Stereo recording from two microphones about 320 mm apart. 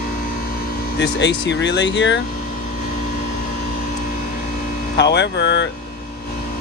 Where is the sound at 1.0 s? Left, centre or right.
Left.